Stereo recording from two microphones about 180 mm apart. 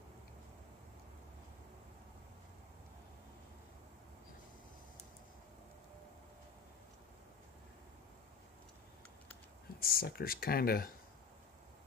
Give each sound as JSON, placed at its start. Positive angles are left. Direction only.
{"t": 9.8, "sound": "speech", "side_deg": 55}